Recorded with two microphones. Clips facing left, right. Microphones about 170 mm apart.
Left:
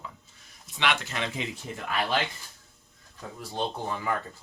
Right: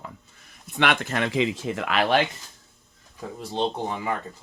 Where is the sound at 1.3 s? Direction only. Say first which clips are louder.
Right 10 dB; 90° right.